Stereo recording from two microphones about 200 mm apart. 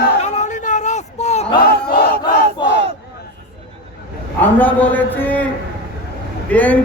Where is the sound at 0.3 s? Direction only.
35° left (ahead or behind).